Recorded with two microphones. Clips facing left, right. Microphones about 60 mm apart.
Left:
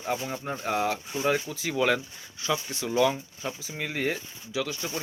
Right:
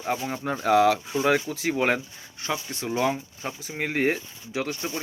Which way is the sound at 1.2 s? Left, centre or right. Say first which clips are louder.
Right 2 dB; right.